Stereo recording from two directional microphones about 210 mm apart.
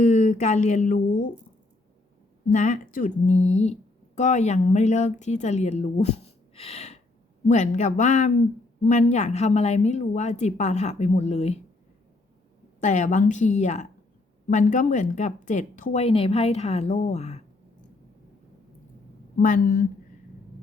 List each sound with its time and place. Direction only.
0.0 s speech: 35° left (ahead or behind)
2.5 s speech: 35° left (ahead or behind)
6.5 s a sound: 30° left (ahead or behind)
7.4 s speech: 35° left (ahead or behind)
12.8 s speech: 35° left (ahead or behind)
19.4 s speech: 40° left (ahead or behind)